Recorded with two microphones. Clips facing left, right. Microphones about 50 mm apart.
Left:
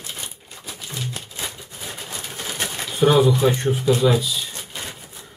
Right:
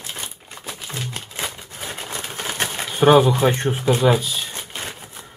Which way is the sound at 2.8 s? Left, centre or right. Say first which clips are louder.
Right 3 dB; right.